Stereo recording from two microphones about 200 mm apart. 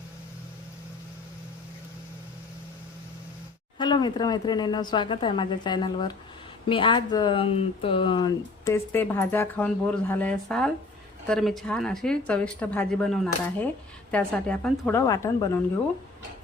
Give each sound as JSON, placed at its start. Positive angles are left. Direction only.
{"t": 3.8, "sound": "a woman's voice", "side_deg": 20}